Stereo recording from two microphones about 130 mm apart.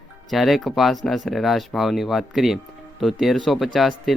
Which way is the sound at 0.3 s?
Centre (ahead or behind).